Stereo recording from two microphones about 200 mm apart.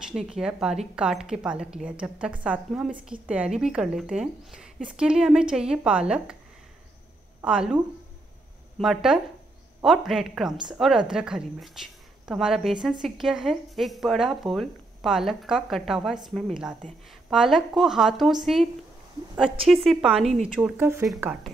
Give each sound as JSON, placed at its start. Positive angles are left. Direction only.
{"t": 0.1, "sound": "a woman's voice", "side_deg": -5}
{"t": 7.4, "sound": "a woman's voice", "side_deg": -5}
{"t": 19.7, "sound": "a woman's voice", "side_deg": 0}